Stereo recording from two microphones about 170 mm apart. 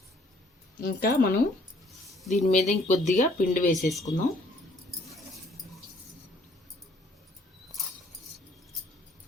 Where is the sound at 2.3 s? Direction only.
45° left (ahead or behind).